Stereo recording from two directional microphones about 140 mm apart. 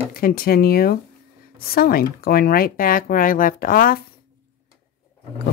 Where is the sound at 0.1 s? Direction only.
90° left.